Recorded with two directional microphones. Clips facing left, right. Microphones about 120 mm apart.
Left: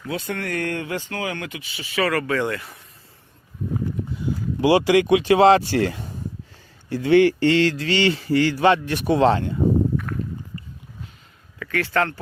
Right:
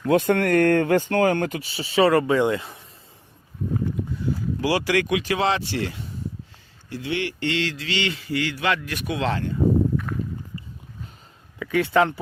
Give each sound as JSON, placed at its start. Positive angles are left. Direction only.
{"t": 0.0, "sound": "speech", "side_deg": -55}
{"t": 4.6, "sound": "speech", "side_deg": 25}
{"t": 5.5, "sound": "speech", "side_deg": 45}
{"t": 11.6, "sound": "speech", "side_deg": -15}